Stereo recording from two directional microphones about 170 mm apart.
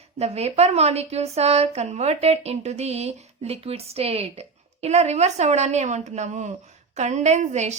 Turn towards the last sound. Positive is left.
turn(degrees=-40)  # may be behind; listen again after turning